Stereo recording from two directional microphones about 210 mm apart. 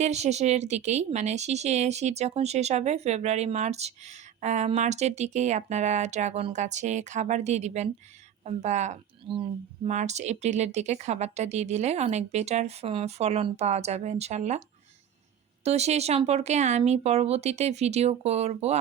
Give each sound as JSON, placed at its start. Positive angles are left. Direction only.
{"t": 0.0, "sound": "speech", "side_deg": -30}
{"t": 15.6, "sound": "speech", "side_deg": -30}